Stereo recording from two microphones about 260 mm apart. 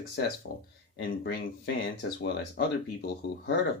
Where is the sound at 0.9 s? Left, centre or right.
Left.